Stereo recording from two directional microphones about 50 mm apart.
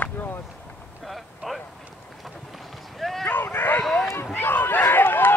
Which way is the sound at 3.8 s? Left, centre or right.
Centre.